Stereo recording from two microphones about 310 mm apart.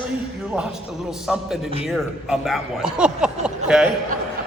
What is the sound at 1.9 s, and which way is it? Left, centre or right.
A man's voice, centre.